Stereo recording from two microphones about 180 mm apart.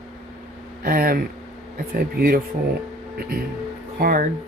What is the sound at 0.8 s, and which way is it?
Speech, 55° right (ahead or behind).